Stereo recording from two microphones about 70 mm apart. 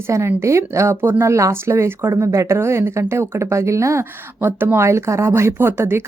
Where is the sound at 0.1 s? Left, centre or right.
Right.